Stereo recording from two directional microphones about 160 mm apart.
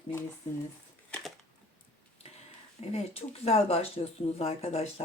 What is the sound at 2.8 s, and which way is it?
Speech, 40° left (ahead or behind).